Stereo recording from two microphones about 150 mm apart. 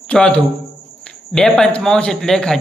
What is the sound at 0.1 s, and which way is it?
A man's voice, 5° left (ahead or behind).